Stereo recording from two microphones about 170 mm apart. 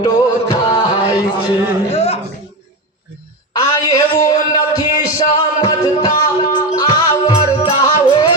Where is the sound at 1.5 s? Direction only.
35° left (ahead or behind).